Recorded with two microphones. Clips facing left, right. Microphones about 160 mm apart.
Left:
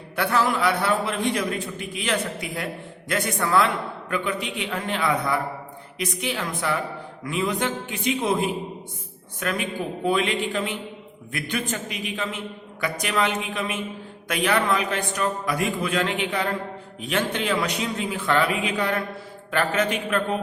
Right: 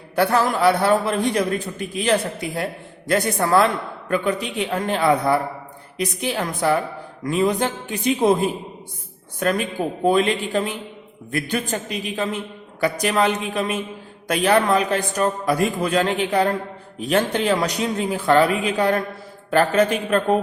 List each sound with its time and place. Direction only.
0.2 s a man's voice: 40° right (ahead or behind)